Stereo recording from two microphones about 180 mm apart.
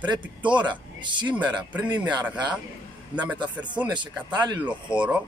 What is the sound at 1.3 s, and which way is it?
Speech, 10° right (ahead or behind).